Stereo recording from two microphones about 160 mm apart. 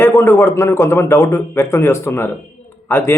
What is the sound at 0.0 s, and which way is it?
A man's voice, 15° left (ahead or behind).